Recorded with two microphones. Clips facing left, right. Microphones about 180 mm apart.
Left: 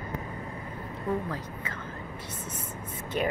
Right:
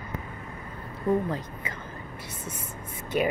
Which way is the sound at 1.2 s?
20° right (ahead or behind).